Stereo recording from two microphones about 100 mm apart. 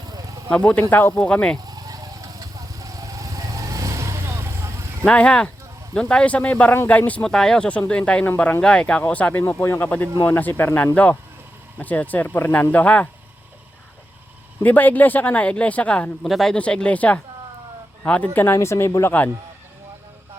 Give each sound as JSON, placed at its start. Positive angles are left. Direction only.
{"t": 0.1, "sound": "a sound", "side_deg": -40}
{"t": 0.5, "sound": "speech", "side_deg": 15}
{"t": 1.6, "sound": "vehicle", "side_deg": -40}
{"t": 5.0, "sound": "speech", "side_deg": 10}
{"t": 14.6, "sound": "speech", "side_deg": 15}
{"t": 16.2, "sound": "speech", "side_deg": 0}